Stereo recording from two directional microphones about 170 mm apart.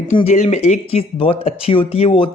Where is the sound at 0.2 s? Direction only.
40° left (ahead or behind).